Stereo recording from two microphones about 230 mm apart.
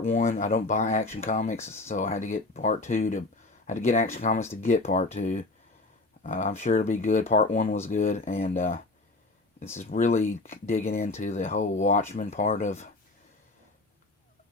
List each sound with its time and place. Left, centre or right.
0.0 s speech: left